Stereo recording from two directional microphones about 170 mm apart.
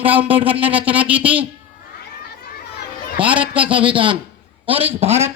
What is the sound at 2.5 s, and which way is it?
Children playing, 60° left (ahead or behind).